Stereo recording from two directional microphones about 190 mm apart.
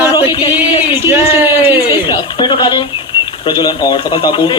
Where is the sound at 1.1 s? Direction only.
10° right (ahead or behind).